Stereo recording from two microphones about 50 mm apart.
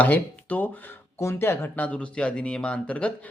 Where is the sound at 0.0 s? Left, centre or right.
Left.